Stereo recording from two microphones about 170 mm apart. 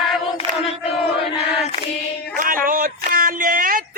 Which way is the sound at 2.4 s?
55° right (ahead or behind).